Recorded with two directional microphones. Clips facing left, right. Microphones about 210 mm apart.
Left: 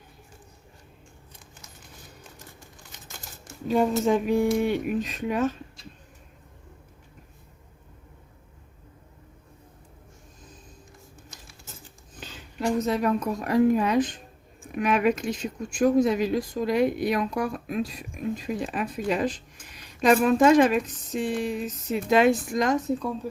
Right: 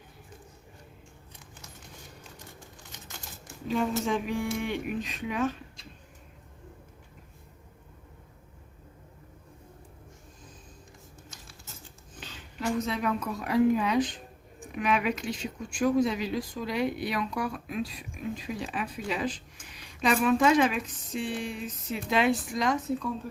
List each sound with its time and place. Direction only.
3.7 s speech: 45° left (ahead or behind)
12.5 s speech: 45° left (ahead or behind)